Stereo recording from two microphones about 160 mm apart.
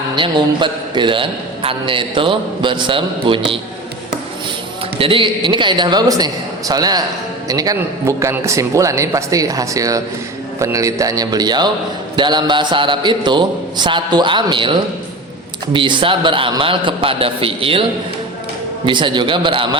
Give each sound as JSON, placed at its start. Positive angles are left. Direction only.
{"t": 0.2, "sound": "a man's voice", "side_deg": -30}
{"t": 4.9, "sound": "a man's voice", "side_deg": -35}
{"t": 18.9, "sound": "a man's voice", "side_deg": -30}